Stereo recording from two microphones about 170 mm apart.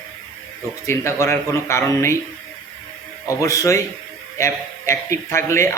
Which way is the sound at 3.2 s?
20° left (ahead or behind).